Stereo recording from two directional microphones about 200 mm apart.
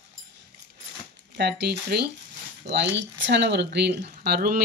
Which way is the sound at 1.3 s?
55° right (ahead or behind).